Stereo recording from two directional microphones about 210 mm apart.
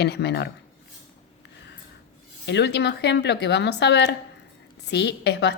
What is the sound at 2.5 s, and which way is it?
A woman's voice, 55° left (ahead or behind).